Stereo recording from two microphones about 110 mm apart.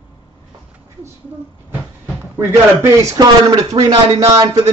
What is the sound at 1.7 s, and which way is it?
Speech, 15° right (ahead or behind).